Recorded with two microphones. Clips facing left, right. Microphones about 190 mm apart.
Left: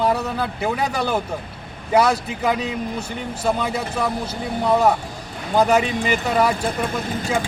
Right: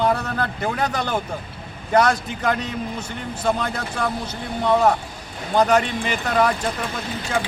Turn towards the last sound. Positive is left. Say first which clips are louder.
# left 4 dB
turn(degrees=50)  # may be behind; listen again after turning